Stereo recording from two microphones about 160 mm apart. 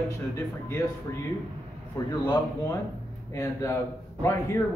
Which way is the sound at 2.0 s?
15° left (ahead or behind).